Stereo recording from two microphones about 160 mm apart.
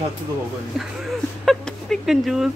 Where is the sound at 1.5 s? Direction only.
5° left (ahead or behind).